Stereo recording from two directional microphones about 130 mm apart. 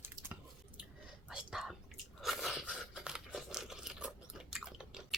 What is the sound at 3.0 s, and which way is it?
Tearing, 5° right (ahead or behind).